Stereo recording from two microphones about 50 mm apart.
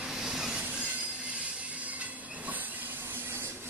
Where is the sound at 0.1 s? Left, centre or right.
Centre.